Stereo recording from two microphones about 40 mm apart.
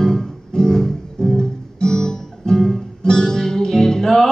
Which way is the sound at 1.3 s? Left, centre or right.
Centre.